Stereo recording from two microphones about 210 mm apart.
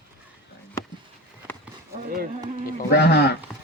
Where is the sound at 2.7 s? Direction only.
50° left (ahead or behind).